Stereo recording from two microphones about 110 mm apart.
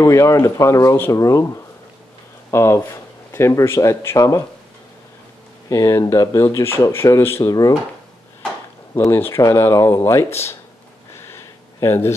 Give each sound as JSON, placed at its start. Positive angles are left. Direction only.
{"t": 0.0, "sound": "speech", "side_deg": 30}
{"t": 2.5, "sound": "speech", "side_deg": 25}
{"t": 5.7, "sound": "speech", "side_deg": 30}
{"t": 8.9, "sound": "speech", "side_deg": 20}
{"t": 11.1, "sound": "a sound", "side_deg": 25}